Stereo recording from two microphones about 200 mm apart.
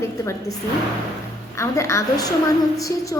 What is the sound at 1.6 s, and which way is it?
A woman's voice, 15° left (ahead or behind).